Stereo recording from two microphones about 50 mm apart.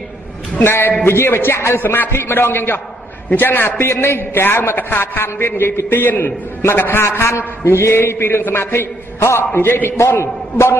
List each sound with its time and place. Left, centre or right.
0.6 s a man's voice: left
7.6 s a man's voice: left
9.2 s a man's voice: left
10.2 s a man's voice: left